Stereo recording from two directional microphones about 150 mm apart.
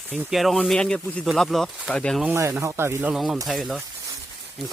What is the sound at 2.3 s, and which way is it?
Speech, 15° right (ahead or behind).